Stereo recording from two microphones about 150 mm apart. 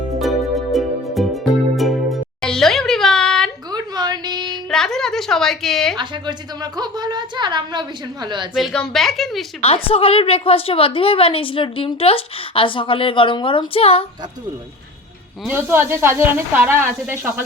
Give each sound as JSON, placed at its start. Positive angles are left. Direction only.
{"t": 0.2, "sound": "music", "side_deg": 0}
{"t": 3.7, "sound": "a sound", "side_deg": -25}
{"t": 4.7, "sound": "a sound", "side_deg": 5}
{"t": 6.0, "sound": "a woman's voice", "side_deg": -30}
{"t": 8.5, "sound": "a woman's voice", "side_deg": 5}
{"t": 9.6, "sound": "a woman's voice", "side_deg": 40}
{"t": 15.4, "sound": "speech", "side_deg": -15}